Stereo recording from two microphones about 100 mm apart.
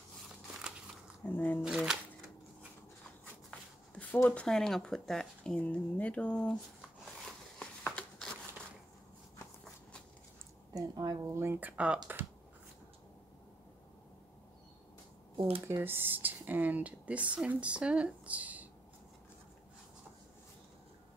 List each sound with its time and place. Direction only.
1.2 s speech: 20° left (ahead or behind)
1.6 s a sound: 5° right (ahead or behind)
3.4 s shuffle: 15° left (ahead or behind)
4.3 s speech: 5° left (ahead or behind)
7.2 s a sound: 10° left (ahead or behind)
10.7 s speech: 35° right (ahead or behind)
11.7 s speech: 10° right (ahead or behind)
15.3 s speech: 70° right (ahead or behind)
15.6 s speech: 25° right (ahead or behind)